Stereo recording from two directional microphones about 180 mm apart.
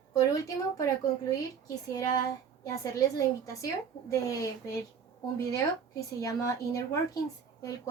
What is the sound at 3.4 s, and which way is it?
A woman's voice, 20° left (ahead or behind).